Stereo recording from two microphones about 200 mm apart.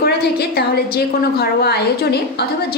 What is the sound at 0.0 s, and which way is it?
A woman's voice, 50° left (ahead or behind).